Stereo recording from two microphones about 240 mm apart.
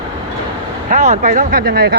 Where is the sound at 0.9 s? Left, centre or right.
Right.